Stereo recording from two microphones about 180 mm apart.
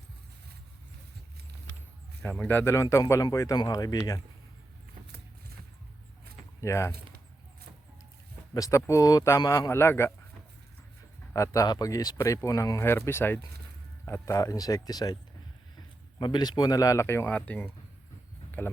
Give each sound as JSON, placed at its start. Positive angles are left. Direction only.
{"t": 2.2, "sound": "speech", "side_deg": 10}
{"t": 6.6, "sound": "speech", "side_deg": 15}
{"t": 8.5, "sound": "speech", "side_deg": 20}
{"t": 11.3, "sound": "speech", "side_deg": 20}